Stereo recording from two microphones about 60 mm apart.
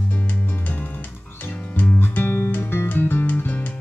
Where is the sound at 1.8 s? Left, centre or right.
Left.